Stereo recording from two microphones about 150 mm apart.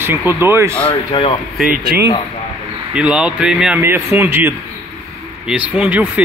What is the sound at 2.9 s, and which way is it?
A man's voice, 5° right (ahead or behind).